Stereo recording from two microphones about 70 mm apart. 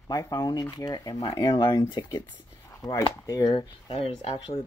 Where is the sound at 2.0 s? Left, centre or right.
Left.